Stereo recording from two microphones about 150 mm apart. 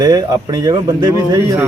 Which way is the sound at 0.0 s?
25° right (ahead or behind).